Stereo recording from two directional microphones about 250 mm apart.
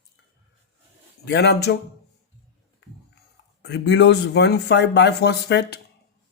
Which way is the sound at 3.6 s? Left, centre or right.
Left.